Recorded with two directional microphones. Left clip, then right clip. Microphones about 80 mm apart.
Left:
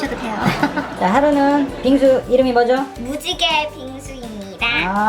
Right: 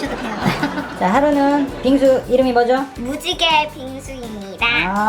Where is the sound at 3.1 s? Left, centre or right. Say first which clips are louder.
Right 2 dB; right.